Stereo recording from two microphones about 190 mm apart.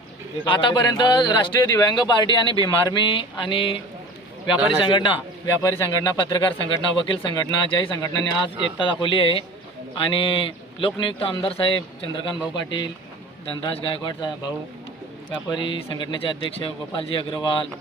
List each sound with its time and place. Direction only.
0.4 s a man's voice: 25° left (ahead or behind)
4.5 s a man's voice: 5° right (ahead or behind)
4.8 s a man's voice: 25° left (ahead or behind)